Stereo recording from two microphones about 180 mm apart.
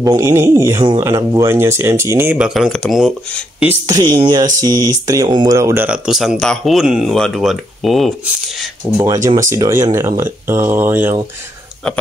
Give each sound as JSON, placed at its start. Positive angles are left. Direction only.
{"t": 0.0, "sound": "speech", "side_deg": -15}
{"t": 3.8, "sound": "speech", "side_deg": -20}
{"t": 9.0, "sound": "speech", "side_deg": -20}